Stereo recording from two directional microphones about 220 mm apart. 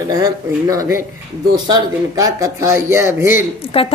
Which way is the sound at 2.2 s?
15° right (ahead or behind).